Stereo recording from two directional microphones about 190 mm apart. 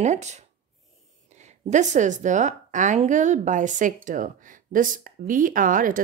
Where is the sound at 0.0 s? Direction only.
35° right (ahead or behind).